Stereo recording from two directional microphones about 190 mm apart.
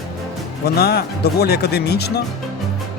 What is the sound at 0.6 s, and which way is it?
Speech, 55° left (ahead or behind).